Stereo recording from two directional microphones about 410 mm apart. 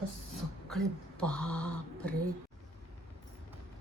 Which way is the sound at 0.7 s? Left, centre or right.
Centre.